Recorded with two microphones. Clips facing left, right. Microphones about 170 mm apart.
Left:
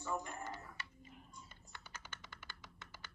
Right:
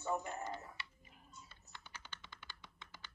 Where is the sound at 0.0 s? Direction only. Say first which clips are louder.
Right 3 dB; 20° right (ahead or behind).